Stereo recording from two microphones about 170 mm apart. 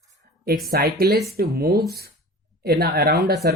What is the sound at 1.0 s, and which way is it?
Speech, 70° right (ahead or behind).